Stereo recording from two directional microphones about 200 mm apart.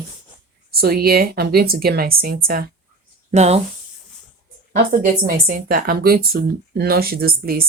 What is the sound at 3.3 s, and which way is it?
Speech, 35° right (ahead or behind).